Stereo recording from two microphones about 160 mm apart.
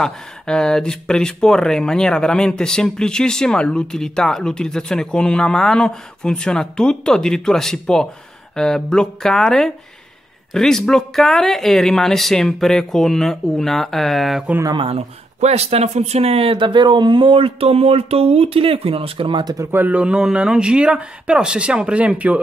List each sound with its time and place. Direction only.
0.0 s speech: 5° left (ahead or behind)
14.6 s speech: 30° right (ahead or behind); by 22.4 s 10° right (ahead or behind)